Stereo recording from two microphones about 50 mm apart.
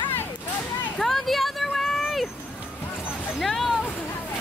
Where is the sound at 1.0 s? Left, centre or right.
Centre.